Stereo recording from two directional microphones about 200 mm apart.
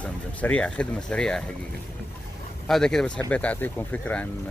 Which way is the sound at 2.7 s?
Centre (ahead or behind).